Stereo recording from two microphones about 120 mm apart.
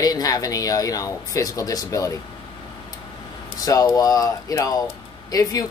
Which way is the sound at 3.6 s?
30° left (ahead or behind).